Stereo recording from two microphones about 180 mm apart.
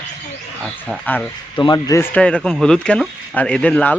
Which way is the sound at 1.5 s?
25° left (ahead or behind).